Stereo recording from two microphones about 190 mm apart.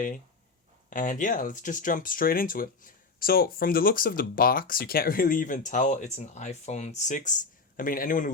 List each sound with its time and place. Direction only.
0.9 s speech: 45° left (ahead or behind)